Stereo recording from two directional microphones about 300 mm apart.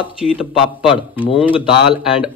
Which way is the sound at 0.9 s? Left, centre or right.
Centre.